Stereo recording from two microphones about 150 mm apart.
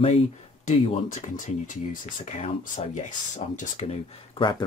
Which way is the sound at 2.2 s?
45° left (ahead or behind).